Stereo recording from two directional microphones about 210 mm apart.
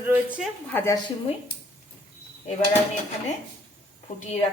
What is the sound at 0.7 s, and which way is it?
Speech, 10° left (ahead or behind).